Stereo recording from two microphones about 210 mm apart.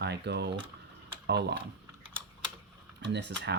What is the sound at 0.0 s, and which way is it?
Speech, 55° right (ahead or behind).